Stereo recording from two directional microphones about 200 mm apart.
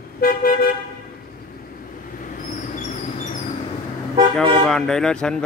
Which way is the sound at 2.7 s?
40° left (ahead or behind).